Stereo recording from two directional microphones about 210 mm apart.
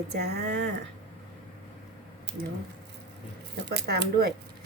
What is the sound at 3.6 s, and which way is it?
Speech, 50° right (ahead or behind).